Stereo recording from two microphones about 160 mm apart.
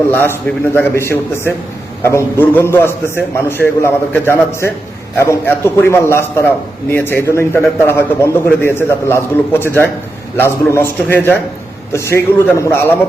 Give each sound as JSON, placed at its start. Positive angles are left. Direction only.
{"t": 0.1, "sound": "a man's voice", "side_deg": 10}